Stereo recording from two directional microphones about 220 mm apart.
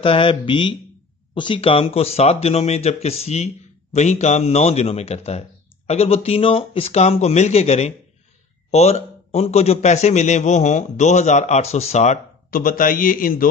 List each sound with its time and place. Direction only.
0.0 s a man's voice: 25° left (ahead or behind); by 13.5 s 40° left (ahead or behind)